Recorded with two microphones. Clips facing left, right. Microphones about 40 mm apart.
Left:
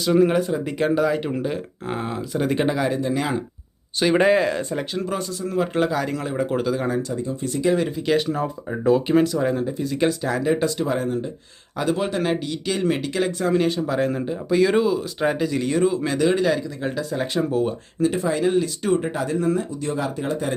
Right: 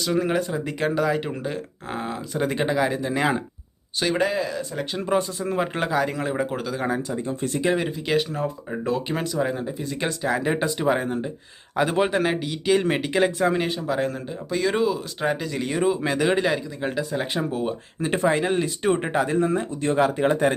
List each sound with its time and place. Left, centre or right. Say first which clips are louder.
0.0 s speech: left 5 dB; centre
3.2 s speech: right 2 dB; right
4.2 s speech: left 6 dB; left
5.1 s speech: right 4 dB; centre
6.6 s speech: left 5 dB; centre
6.8 s speech: left 1 dB; centre
7.2 s speech: left 1 dB; right
7.9 s speech: left 3 dB; centre
10.3 s speech: left 2 dB; right
12.2 s speech: even; centre
14.1 s speech: left 6 dB; centre
18.1 s speech: right 2 dB; right
18.4 s speech: left 2 dB; right
19.8 s speech: right 5 dB; right